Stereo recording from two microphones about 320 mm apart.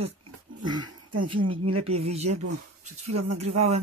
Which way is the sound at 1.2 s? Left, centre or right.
Centre.